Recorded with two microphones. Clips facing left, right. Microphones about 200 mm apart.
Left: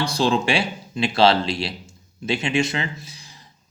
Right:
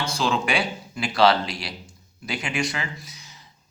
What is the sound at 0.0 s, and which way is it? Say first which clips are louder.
Speech: left 4 dB; 35° left (ahead or behind).